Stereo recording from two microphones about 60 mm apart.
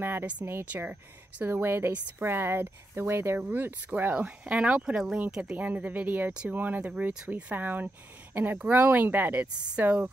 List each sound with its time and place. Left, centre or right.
0.0 s a woman's voice: right
1.4 s a woman's voice: right
3.3 s a woman's voice: right
4.1 s speech: right
5.6 s a woman's voice: right